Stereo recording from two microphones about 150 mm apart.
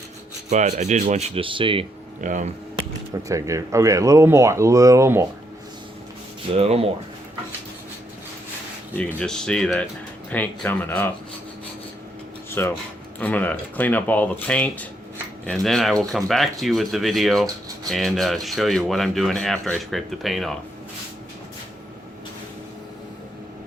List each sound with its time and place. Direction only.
0.5 s speech: 50° right (ahead or behind); by 1.9 s 35° right (ahead or behind)
2.2 s speech: 55° right (ahead or behind)
3.2 s speech: 20° right (ahead or behind)
6.5 s speech: 40° right (ahead or behind)
9.0 s speech: 10° left (ahead or behind)
12.6 s speech: 15° left (ahead or behind)